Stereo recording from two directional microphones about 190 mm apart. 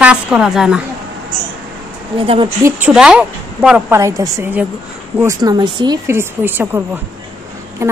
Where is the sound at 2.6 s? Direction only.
5° right (ahead or behind).